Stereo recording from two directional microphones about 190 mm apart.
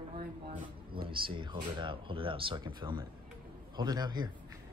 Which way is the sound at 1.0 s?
25° right (ahead or behind).